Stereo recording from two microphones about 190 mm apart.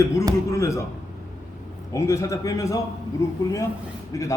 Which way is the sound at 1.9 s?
15° left (ahead or behind).